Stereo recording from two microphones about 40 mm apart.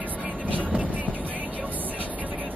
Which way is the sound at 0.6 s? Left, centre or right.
Right.